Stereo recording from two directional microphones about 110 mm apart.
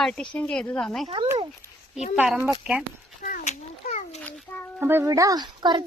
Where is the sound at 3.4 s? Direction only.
90° left.